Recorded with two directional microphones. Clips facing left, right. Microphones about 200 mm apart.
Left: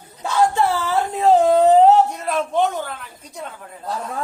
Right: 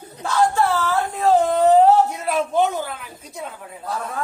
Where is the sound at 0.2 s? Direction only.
20° left (ahead or behind).